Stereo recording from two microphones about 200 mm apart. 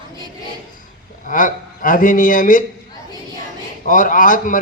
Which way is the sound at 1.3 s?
40° left (ahead or behind).